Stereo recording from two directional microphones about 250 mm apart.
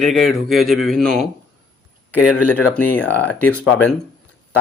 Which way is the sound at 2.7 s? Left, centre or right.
Centre.